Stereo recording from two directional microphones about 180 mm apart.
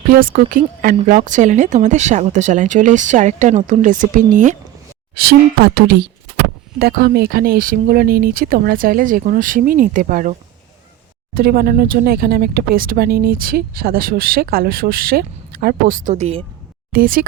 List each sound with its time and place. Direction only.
0.3 s speech: 50° right (ahead or behind)
5.1 s speech: 60° right (ahead or behind)
11.3 s speech: 55° right (ahead or behind); by 16.4 s 40° right (ahead or behind)
16.9 s speech: 50° right (ahead or behind)